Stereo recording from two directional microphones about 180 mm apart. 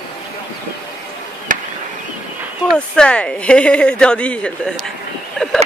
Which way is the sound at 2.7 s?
5° left (ahead or behind).